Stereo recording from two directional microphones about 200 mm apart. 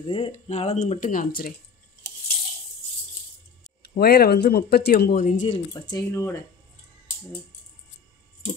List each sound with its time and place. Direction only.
0.1 s speech: 30° left (ahead or behind)
3.8 s speech: 50° left (ahead or behind)
5.7 s speech: 15° left (ahead or behind)